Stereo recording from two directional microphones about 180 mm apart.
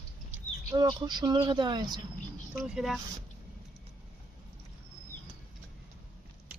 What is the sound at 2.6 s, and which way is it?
Speech, 5° right (ahead or behind).